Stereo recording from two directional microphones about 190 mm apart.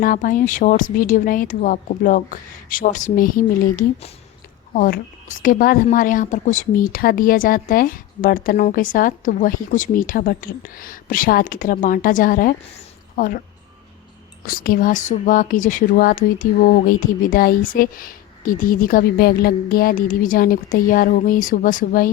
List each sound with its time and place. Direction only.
0.0 s a woman's voice: 45° left (ahead or behind)
12.7 s a sound: 45° left (ahead or behind)
14.4 s a woman's voice: 50° left (ahead or behind)